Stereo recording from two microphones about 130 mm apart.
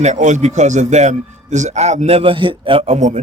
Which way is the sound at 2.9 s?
65° right (ahead or behind).